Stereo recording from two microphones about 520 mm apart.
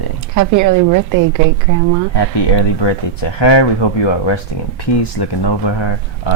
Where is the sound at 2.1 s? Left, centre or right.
Left.